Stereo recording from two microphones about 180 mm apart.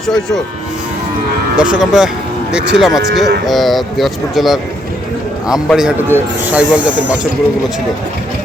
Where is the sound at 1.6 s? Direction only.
5° right (ahead or behind).